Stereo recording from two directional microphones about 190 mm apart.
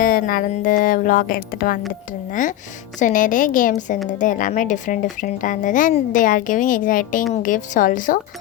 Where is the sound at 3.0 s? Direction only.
45° left (ahead or behind).